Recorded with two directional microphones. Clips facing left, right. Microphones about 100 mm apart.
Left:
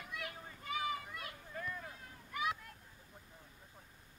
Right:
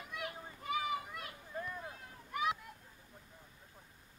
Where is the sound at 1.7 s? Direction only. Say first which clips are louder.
Right 2 dB; 20° right (ahead or behind).